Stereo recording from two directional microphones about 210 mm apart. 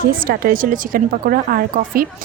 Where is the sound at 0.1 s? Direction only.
45° right (ahead or behind).